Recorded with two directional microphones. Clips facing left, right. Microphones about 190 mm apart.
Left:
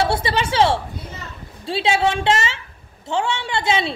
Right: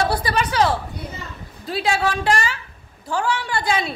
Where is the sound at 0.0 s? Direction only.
25° left (ahead or behind).